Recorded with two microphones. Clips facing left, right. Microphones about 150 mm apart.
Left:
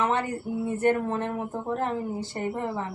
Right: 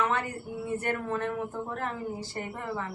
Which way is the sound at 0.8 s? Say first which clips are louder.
Left 9 dB; 25° left (ahead or behind).